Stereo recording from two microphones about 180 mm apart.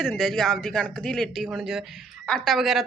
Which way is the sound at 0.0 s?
5° left (ahead or behind).